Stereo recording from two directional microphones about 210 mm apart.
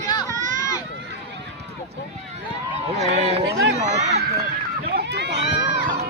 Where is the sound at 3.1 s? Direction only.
30° right (ahead or behind).